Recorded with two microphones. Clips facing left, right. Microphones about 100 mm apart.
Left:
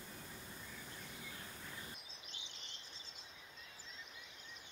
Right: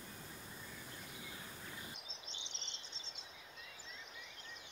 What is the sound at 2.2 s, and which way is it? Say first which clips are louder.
Cricket: right 2 dB; 25° right (ahead or behind).